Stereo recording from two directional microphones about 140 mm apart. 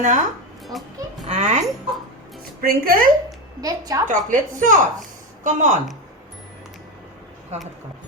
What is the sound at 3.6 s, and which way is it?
Speech, 25° right (ahead or behind).